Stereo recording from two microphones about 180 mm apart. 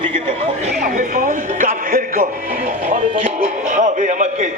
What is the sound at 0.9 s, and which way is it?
Speech, 45° right (ahead or behind).